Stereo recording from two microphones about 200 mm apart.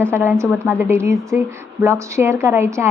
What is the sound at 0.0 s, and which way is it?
A woman's voice, 10° right (ahead or behind).